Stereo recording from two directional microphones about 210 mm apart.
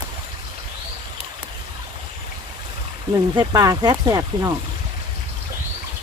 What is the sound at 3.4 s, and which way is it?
Speech, 20° right (ahead or behind).